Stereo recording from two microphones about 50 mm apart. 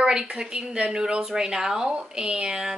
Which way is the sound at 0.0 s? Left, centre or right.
Centre.